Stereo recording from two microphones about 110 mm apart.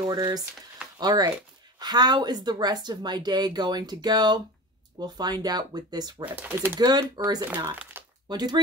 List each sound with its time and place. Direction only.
0.1 s speech: 35° right (ahead or behind)
6.2 s speech: 15° right (ahead or behind)
6.8 s speech: 35° right (ahead or behind)
7.4 s speech: 15° right (ahead or behind)
8.3 s speech: 40° right (ahead or behind)